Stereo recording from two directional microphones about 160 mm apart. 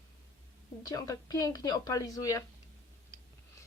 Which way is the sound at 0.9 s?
20° left (ahead or behind).